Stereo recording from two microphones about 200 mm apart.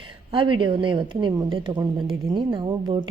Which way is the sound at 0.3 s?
25° right (ahead or behind).